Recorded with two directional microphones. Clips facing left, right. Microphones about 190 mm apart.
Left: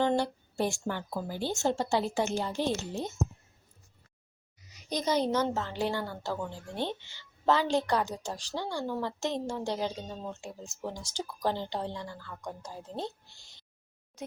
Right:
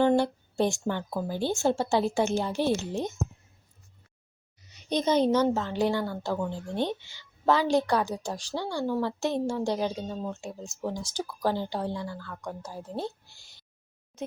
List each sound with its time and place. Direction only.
0.0 s a woman's voice: 15° right (ahead or behind)
4.7 s a woman's voice: 25° right (ahead or behind); by 12.1 s 10° right (ahead or behind)
12.1 s speech: 15° left (ahead or behind)
12.6 s a woman's voice: 5° right (ahead or behind)